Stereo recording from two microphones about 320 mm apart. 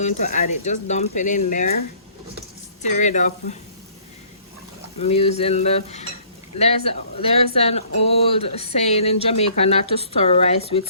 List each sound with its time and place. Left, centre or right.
0.0 s speech: left
2.8 s speech: left
5.0 s speech: centre